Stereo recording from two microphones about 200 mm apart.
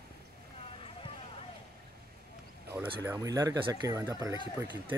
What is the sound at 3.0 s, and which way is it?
Speech, 15° right (ahead or behind).